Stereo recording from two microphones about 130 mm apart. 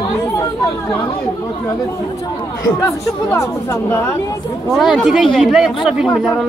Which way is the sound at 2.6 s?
25° left (ahead or behind).